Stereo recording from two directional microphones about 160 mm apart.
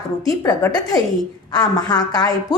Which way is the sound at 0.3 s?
20° left (ahead or behind).